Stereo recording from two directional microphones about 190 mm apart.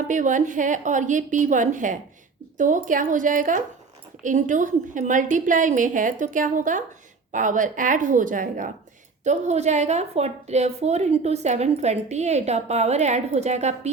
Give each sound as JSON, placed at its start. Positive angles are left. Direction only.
{"t": 0.1, "sound": "a woman's voice", "side_deg": -40}